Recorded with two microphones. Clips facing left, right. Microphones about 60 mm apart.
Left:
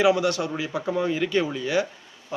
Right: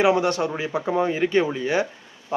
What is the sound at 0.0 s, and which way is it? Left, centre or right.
A man's voice, right.